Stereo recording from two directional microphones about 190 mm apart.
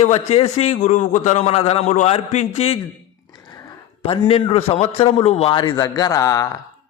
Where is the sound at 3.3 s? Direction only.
20° left (ahead or behind).